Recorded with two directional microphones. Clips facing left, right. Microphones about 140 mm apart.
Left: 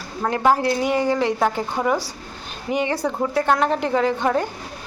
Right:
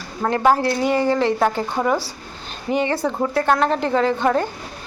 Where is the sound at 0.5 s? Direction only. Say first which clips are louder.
Right 1 dB; 10° left (ahead or behind).